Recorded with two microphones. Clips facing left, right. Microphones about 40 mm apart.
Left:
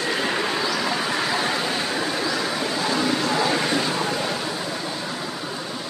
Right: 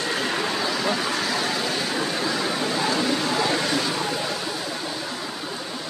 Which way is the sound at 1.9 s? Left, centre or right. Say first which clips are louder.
Left 1 dB; centre.